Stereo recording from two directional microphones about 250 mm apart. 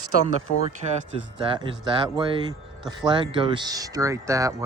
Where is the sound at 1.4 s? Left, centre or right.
Centre.